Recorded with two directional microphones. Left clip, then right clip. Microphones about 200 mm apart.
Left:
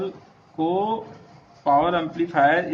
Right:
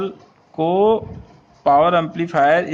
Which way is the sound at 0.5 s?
50° right (ahead or behind).